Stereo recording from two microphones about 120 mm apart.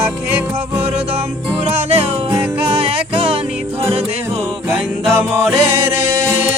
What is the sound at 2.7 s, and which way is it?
Music, 50° right (ahead or behind).